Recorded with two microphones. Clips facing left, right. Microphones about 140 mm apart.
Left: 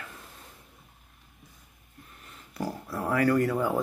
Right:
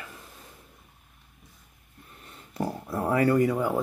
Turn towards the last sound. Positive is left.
turn(degrees=-5)  # may be behind; listen again after turning